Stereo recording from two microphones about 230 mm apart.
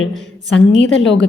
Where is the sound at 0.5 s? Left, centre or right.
Left.